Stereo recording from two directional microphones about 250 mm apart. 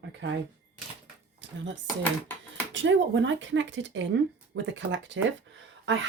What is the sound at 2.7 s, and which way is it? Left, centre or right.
Speech, right.